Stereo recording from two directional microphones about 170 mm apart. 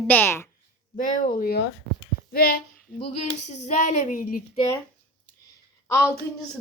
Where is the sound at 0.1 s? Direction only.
10° left (ahead or behind).